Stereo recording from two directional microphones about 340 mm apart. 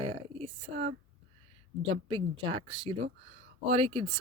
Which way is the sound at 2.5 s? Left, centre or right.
Centre.